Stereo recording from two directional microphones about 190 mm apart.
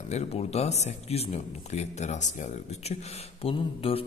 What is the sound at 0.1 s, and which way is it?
A man's voice, 35° left (ahead or behind).